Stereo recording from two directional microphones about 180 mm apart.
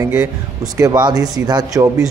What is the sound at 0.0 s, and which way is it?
Speech, 15° right (ahead or behind).